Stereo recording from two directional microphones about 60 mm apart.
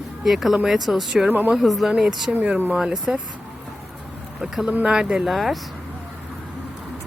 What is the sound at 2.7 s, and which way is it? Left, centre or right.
Speech, centre.